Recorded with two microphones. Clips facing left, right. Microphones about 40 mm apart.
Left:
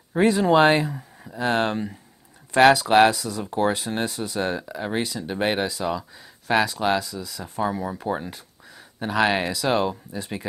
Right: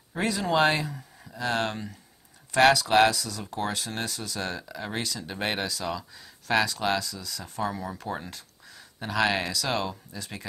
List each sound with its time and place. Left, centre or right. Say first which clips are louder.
0.2 s speech: left 7 dB; left